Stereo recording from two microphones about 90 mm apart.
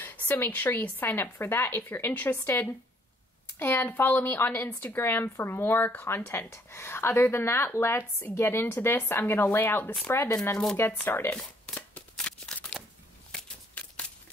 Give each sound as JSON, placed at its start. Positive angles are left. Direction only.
{"t": 0.0, "sound": "speech", "side_deg": 20}
{"t": 11.3, "sound": "shuffling cards", "side_deg": 15}
{"t": 13.3, "sound": "a sound", "side_deg": 10}